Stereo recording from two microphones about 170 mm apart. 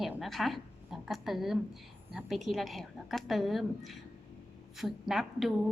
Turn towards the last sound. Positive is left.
turn(degrees=0)  # may be behind; listen again after turning